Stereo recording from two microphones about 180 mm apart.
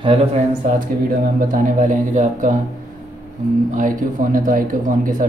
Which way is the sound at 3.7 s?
45° right (ahead or behind).